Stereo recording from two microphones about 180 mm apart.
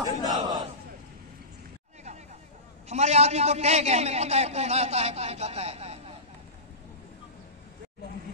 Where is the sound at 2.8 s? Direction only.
35° right (ahead or behind).